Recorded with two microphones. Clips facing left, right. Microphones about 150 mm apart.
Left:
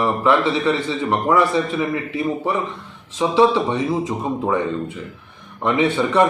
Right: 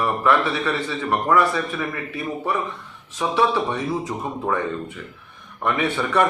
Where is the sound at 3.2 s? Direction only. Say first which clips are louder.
Left 5 dB; 20° left (ahead or behind).